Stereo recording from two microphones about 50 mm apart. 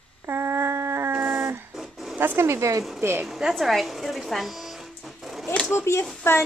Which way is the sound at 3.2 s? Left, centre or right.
Centre.